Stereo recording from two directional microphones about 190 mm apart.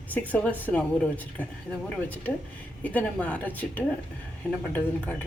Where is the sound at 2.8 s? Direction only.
10° left (ahead or behind).